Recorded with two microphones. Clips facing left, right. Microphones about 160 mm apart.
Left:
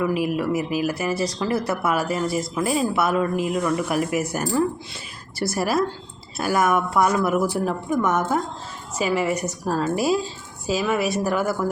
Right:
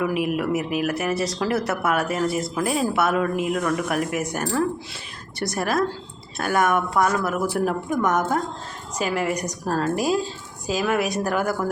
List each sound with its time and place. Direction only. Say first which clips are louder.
0.0 s speech: left 1 dB; centre (ahead or behind)
7.6 s speech: even; centre (ahead or behind)